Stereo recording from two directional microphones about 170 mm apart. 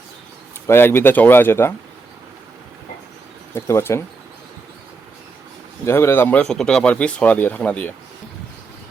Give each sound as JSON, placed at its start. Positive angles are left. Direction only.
{"t": 0.7, "sound": "speech", "side_deg": 15}
{"t": 3.5, "sound": "speech", "side_deg": 15}
{"t": 5.8, "sound": "speech", "side_deg": 15}